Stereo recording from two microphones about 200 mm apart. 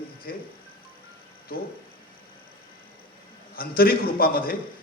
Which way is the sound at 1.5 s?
45° left (ahead or behind).